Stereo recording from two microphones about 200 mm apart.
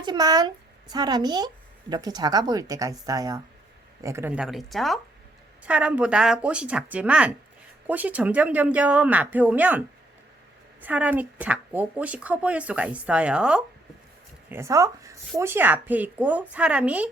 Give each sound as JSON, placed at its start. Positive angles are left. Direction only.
{"t": 0.0, "sound": "a woman's voice", "side_deg": -20}